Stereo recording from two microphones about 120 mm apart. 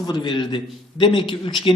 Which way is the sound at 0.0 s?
40° left (ahead or behind).